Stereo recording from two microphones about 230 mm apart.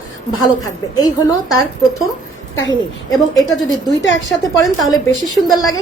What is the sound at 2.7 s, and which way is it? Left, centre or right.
Speech, centre.